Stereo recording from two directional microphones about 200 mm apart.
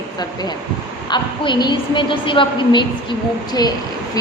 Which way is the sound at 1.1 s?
20° left (ahead or behind).